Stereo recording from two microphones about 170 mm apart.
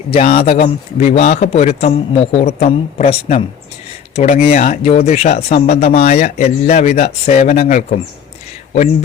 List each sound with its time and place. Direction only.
0.1 s speech: 35° left (ahead or behind)